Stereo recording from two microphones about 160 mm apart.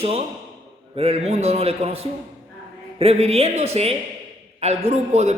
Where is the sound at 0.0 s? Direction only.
40° right (ahead or behind).